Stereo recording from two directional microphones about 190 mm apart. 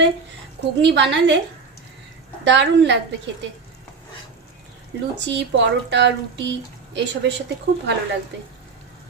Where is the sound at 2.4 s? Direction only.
70° right (ahead or behind).